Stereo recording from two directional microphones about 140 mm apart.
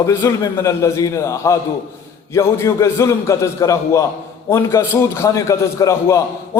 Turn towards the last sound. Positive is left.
turn(degrees=20)  # may be behind; listen again after turning